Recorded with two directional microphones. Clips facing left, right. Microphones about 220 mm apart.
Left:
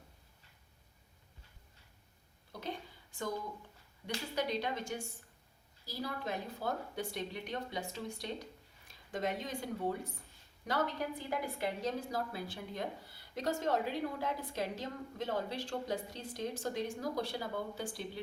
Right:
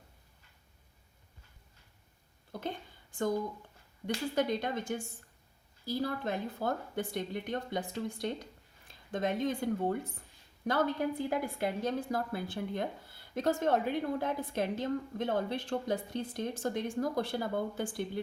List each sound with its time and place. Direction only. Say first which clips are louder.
3.1 s a woman's voice: right 7 dB; 50° right (ahead or behind)